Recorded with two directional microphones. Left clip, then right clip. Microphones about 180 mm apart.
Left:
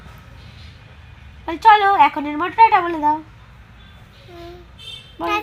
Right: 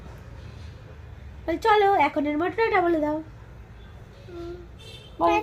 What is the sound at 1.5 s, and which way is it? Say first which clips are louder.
Speech: left 7 dB; 20° left (ahead or behind).